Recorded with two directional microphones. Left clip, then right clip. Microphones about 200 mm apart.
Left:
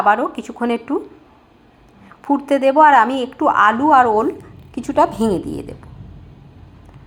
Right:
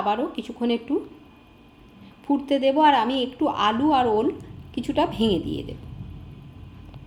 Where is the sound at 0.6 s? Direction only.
35° left (ahead or behind).